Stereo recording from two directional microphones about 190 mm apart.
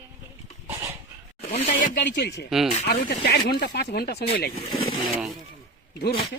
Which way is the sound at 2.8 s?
55° left (ahead or behind).